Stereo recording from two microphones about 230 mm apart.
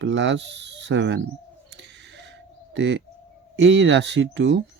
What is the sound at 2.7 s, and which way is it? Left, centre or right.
Speech, right.